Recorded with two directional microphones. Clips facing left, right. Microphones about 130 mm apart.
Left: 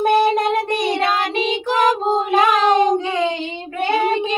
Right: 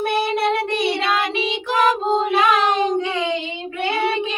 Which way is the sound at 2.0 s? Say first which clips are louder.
Left 1 dB; 45° left (ahead or behind).